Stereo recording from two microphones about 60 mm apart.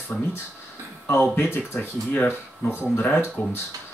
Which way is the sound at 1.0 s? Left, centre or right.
Left.